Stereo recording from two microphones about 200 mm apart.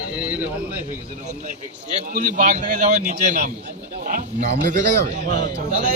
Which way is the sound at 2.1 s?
40° right (ahead or behind).